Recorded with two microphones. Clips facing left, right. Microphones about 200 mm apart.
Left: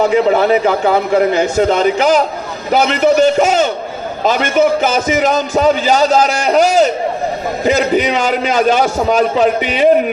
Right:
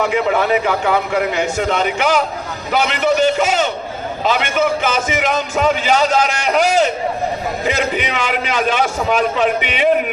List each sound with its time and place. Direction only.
0.0 s a man's voice: 35° left (ahead or behind)